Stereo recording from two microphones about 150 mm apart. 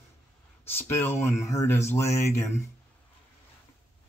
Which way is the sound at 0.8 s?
15° left (ahead or behind).